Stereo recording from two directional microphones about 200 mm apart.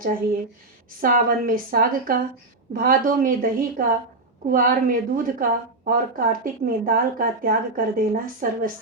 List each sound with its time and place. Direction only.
1.0 s a woman's voice: 45° right (ahead or behind)